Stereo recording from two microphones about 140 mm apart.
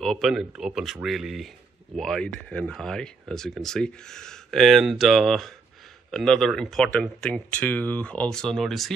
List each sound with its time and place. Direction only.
0.0 s speech: centre (ahead or behind)